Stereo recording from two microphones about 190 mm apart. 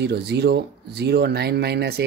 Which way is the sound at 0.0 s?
60° right (ahead or behind).